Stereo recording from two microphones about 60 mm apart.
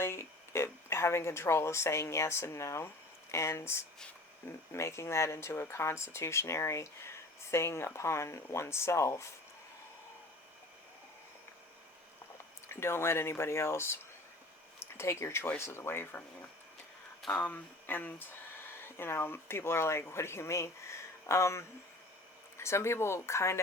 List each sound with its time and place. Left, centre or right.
0.0 s speech: left
12.6 s speech: left
17.3 s speech: left